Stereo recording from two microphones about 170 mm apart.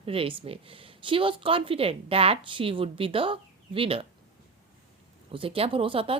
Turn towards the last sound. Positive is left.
turn(degrees=-30)  # may be behind; listen again after turning